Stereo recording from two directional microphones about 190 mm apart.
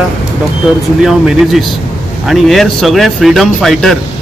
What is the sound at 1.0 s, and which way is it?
Speech, centre (ahead or behind).